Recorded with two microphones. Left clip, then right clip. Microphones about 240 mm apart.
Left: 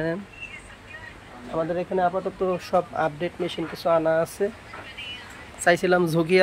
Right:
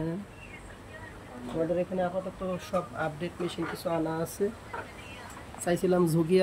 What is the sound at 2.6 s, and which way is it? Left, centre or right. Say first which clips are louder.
Speech: left 7 dB; centre.